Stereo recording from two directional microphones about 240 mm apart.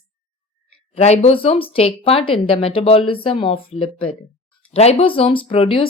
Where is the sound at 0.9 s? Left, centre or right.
Left.